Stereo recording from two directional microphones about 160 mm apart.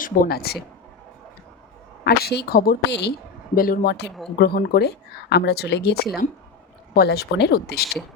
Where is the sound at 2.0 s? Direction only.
85° left.